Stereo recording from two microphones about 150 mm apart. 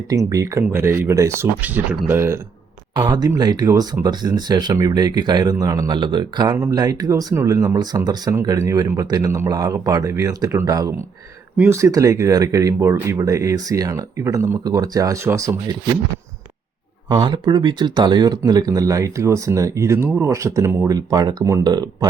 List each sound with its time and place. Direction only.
0.1 s a man's voice: 20° right (ahead or behind)
2.9 s a man's voice: 25° right (ahead or behind)
17.1 s a man's voice: 30° right (ahead or behind)